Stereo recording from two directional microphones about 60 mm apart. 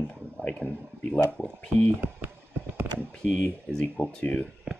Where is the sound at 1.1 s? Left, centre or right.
Left.